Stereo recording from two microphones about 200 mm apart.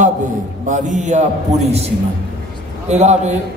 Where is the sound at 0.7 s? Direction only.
40° right (ahead or behind).